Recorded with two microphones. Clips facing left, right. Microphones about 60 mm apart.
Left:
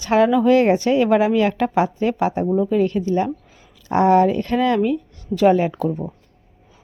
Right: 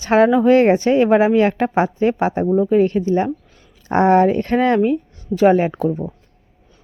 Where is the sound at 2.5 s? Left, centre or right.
Right.